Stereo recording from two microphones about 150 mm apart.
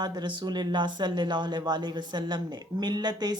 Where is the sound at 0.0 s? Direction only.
30° right (ahead or behind).